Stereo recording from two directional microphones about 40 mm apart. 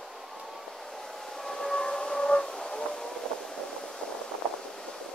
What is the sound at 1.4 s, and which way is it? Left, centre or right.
Train, centre.